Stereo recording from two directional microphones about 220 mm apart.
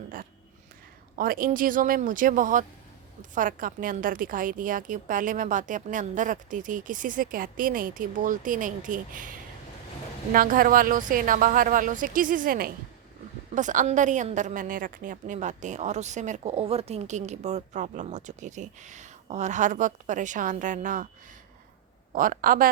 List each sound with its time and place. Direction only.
1.1 s a woman's voice: 40° right (ahead or behind)
22.1 s a woman's voice: 40° right (ahead or behind)